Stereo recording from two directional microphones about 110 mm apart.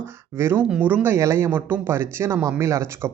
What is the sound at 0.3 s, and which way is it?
Speech, 20° right (ahead or behind).